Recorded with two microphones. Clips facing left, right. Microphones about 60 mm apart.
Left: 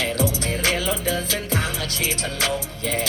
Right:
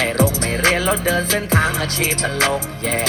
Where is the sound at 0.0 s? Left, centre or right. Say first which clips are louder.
Right 5 dB; right.